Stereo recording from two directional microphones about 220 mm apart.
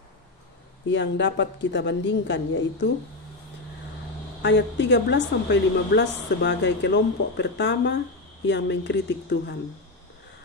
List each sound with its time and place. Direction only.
0.8 s a woman's voice: 55° left (ahead or behind)
4.4 s a woman's voice: 55° left (ahead or behind)